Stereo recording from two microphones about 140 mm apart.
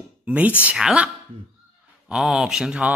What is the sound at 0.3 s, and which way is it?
Speech, 10° right (ahead or behind).